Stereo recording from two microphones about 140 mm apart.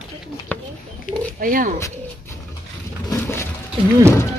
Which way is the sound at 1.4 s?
80° right.